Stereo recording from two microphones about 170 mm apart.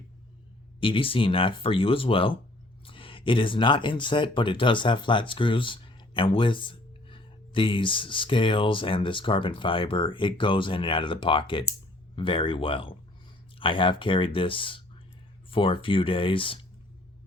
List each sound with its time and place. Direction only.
0.8 s speech: 30° left (ahead or behind)